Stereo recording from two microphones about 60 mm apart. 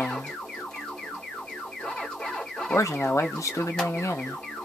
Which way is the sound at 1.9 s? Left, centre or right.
Centre.